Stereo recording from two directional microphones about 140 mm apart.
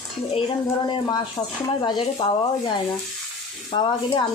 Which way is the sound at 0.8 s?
30° left (ahead or behind).